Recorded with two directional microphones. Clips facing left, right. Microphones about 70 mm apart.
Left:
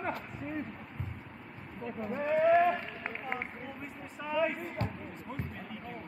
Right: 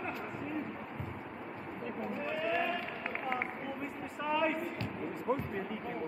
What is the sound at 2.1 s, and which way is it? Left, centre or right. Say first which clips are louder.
Speech: left 10 dB; left.